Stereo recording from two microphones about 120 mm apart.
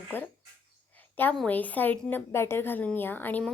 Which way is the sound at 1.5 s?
15° left (ahead or behind).